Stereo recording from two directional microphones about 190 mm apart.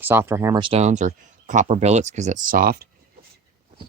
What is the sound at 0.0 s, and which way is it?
Speech, 10° right (ahead or behind).